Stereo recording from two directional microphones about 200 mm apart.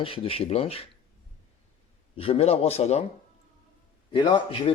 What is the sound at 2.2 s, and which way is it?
Speech, 30° left (ahead or behind).